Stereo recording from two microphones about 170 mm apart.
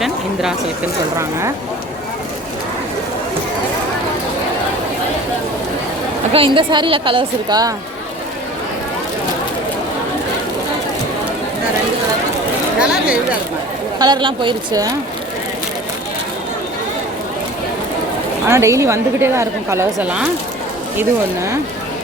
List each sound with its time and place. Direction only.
6.3 s a woman's voice: 30° right (ahead or behind)
12.8 s speech: 5° right (ahead or behind)
14.0 s speech: 25° right (ahead or behind)
18.4 s a woman's voice: 15° right (ahead or behind)